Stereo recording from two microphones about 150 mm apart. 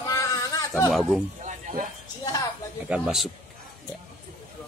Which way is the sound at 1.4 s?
65° right (ahead or behind).